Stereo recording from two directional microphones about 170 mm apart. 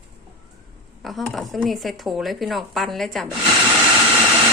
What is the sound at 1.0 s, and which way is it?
A woman's voice, centre (ahead or behind).